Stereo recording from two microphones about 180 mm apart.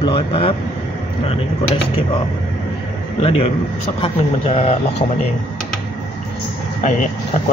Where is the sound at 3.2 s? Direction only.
35° left (ahead or behind).